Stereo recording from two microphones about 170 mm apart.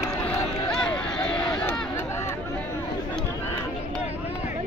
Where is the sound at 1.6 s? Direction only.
5° left (ahead or behind).